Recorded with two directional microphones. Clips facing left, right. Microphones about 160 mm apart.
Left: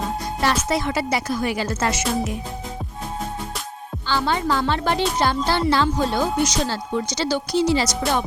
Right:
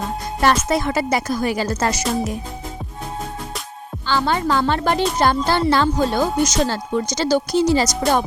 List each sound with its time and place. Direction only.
0.4 s speech: 50° right (ahead or behind)
4.0 s speech: 50° right (ahead or behind)